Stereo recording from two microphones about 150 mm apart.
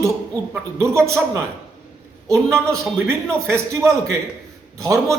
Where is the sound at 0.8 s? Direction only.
20° right (ahead or behind).